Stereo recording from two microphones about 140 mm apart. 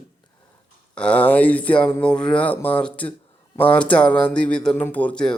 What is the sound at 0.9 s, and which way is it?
Speech, 10° left (ahead or behind).